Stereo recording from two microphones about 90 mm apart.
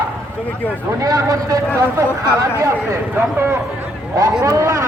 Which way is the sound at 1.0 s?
40° right (ahead or behind).